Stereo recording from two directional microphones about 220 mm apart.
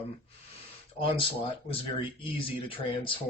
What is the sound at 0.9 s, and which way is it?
Speech, 25° left (ahead or behind).